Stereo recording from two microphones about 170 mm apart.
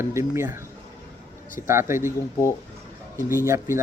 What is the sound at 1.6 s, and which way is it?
Speech, 15° right (ahead or behind).